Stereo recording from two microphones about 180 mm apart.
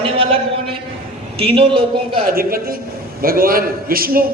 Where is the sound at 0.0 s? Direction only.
30° right (ahead or behind).